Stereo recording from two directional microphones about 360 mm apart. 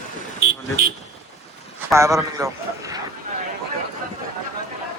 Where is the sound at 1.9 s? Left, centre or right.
Centre.